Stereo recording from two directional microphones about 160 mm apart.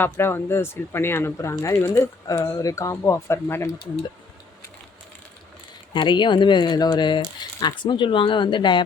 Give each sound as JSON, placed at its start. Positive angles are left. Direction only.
{"t": 0.0, "sound": "speech", "side_deg": 15}
{"t": 5.9, "sound": "speech", "side_deg": 30}